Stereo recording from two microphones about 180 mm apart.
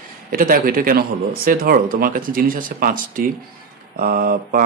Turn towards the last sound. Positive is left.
turn(degrees=-50)  # may be behind; listen again after turning